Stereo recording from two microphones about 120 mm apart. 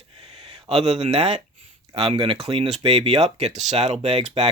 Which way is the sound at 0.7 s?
50° right (ahead or behind).